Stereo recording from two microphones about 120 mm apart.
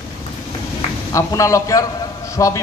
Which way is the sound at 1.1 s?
25° left (ahead or behind).